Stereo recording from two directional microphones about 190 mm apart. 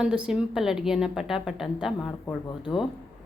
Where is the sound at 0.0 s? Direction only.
5° right (ahead or behind).